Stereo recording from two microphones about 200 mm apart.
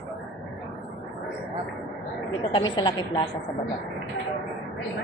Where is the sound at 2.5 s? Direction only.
25° left (ahead or behind).